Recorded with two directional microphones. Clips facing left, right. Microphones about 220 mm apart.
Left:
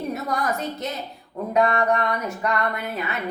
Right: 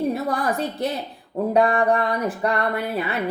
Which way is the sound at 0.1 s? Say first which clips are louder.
Right 3 dB; 30° right (ahead or behind).